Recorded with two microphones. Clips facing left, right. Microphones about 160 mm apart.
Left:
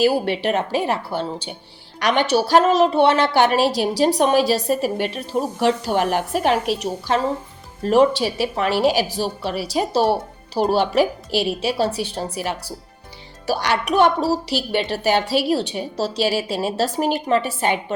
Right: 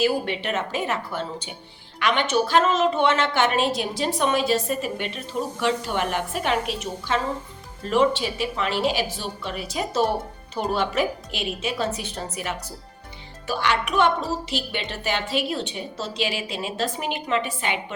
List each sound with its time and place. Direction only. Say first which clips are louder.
0.0 s a woman's voice: left 5 dB; 40° left (ahead or behind)